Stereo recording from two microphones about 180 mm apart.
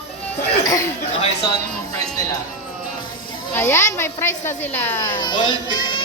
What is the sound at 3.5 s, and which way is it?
A child's voice, 15° left (ahead or behind).